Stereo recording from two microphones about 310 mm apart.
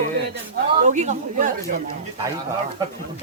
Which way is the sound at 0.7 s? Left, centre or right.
Right.